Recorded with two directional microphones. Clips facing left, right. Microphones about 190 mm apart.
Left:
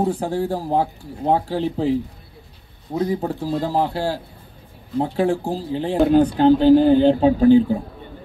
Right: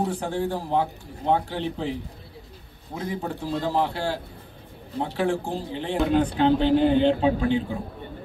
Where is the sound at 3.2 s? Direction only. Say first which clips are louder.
Left 5 dB; 35° left (ahead or behind).